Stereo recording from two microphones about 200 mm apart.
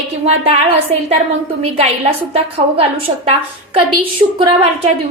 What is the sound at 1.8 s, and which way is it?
A woman's voice, 30° right (ahead or behind).